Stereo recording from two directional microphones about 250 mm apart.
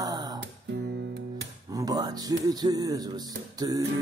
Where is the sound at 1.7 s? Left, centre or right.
Centre.